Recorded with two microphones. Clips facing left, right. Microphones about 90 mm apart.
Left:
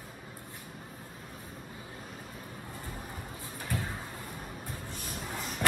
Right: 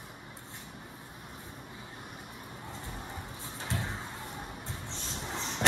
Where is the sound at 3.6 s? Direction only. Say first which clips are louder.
Even; 20° right (ahead or behind).